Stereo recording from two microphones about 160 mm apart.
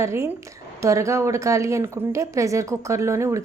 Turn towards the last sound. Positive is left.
turn(degrees=-20)  # may be behind; listen again after turning